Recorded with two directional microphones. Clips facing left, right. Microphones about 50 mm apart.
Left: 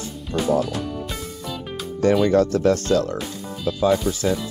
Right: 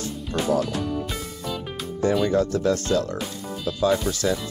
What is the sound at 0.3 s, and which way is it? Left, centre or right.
Music, centre.